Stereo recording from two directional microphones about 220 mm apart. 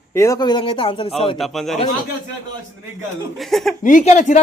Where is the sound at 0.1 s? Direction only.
15° left (ahead or behind).